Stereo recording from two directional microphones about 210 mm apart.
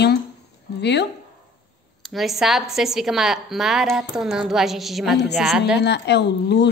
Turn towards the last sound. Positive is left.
turn(degrees=55)  # may be behind; listen again after turning